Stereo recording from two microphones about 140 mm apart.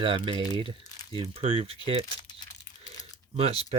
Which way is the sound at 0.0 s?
35° right (ahead or behind).